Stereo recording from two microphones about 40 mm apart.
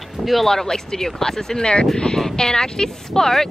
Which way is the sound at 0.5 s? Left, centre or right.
Centre.